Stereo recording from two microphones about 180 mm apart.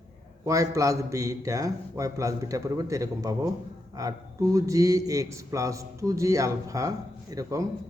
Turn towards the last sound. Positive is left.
turn(degrees=-20)  # may be behind; listen again after turning